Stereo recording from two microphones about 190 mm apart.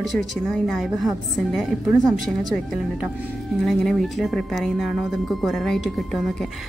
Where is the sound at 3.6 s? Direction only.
Centre (ahead or behind).